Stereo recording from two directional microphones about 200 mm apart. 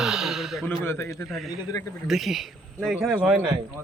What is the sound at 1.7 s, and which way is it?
Speech, 15° left (ahead or behind).